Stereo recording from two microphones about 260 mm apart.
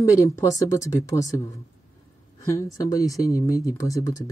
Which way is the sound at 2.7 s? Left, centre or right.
Centre.